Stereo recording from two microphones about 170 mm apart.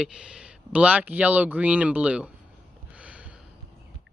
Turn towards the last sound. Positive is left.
turn(degrees=-5)  # may be behind; listen again after turning